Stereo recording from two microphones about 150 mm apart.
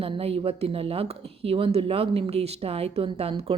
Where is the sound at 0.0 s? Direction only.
40° right (ahead or behind).